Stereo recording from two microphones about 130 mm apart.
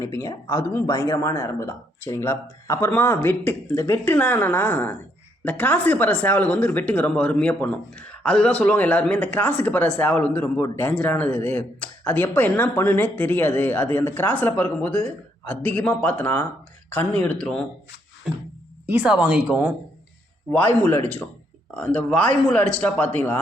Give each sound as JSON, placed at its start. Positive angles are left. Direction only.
{"t": 0.0, "sound": "speech", "side_deg": 25}
{"t": 18.9, "sound": "speech", "side_deg": -10}
{"t": 20.5, "sound": "speech", "side_deg": 10}